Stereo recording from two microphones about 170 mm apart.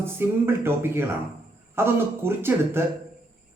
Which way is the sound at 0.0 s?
15° right (ahead or behind).